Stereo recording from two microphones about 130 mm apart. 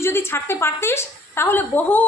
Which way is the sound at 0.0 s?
20° left (ahead or behind).